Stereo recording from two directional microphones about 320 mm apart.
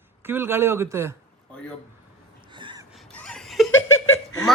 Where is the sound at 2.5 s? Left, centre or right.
Centre.